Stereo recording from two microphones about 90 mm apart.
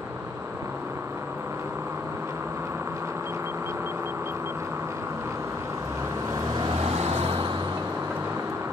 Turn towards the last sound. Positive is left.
turn(degrees=-80)